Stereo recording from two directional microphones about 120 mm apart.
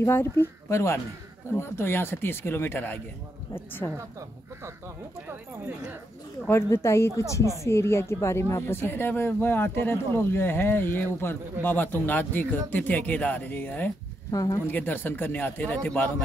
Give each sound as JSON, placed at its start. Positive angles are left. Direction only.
{"t": 0.0, "sound": "speech", "side_deg": 20}
{"t": 6.4, "sound": "speech", "side_deg": 20}
{"t": 14.3, "sound": "speech", "side_deg": 30}
{"t": 14.7, "sound": "speech", "side_deg": 15}